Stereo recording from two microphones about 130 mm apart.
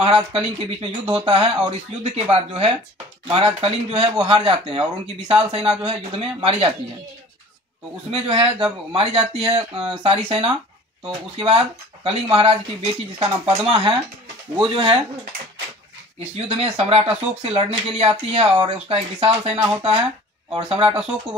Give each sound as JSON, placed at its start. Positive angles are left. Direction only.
{"t": 0.0, "sound": "speech", "side_deg": -45}
{"t": 8.1, "sound": "speech", "side_deg": -45}
{"t": 16.3, "sound": "speech", "side_deg": -50}